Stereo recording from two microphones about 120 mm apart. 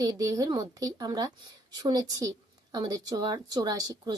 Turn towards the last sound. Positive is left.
turn(degrees=-30)  # may be behind; listen again after turning